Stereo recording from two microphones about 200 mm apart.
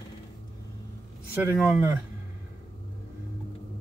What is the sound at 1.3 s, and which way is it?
Speech, 10° right (ahead or behind).